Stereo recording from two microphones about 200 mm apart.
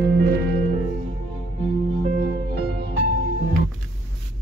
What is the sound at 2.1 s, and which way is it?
Music, 50° right (ahead or behind).